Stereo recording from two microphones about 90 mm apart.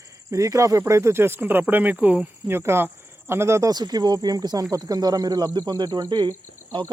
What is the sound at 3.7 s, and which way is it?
Speech, 50° right (ahead or behind).